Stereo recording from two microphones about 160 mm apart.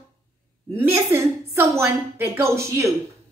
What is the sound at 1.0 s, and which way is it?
A woman's voice, 15° right (ahead or behind).